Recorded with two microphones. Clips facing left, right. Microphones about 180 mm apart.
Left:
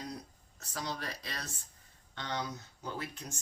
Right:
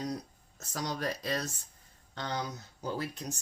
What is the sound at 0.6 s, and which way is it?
Speech, 40° right (ahead or behind).